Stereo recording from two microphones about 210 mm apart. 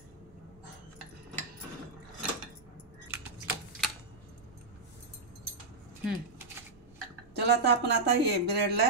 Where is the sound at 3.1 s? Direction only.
10° right (ahead or behind).